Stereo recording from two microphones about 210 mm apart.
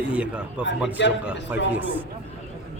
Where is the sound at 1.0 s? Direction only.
60° left (ahead or behind).